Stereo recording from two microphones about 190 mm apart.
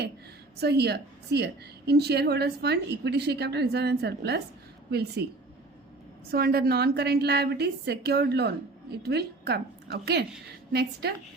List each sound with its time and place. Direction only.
0.6 s a woman's voice: 60° right (ahead or behind)
6.3 s a woman's voice: 55° right (ahead or behind)